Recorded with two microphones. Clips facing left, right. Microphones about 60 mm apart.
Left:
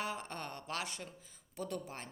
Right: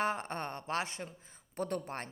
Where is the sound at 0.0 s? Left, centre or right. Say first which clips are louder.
Right 6 dB; right.